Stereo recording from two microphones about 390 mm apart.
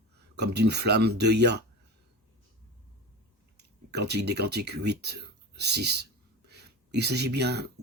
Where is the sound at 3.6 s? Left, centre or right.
Right.